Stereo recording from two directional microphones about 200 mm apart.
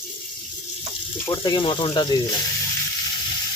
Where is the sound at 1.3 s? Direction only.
20° left (ahead or behind).